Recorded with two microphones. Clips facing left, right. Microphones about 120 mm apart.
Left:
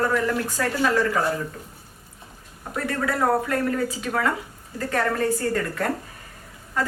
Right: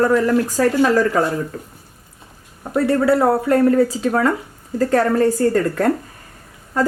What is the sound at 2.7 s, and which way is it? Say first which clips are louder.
A woman's voice: right 11 dB; 30° right (ahead or behind).